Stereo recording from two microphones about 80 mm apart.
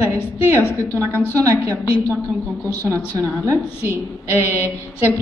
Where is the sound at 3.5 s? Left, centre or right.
Right.